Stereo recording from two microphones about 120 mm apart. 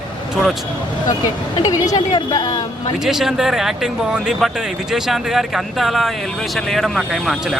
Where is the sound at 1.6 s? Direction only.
30° left (ahead or behind).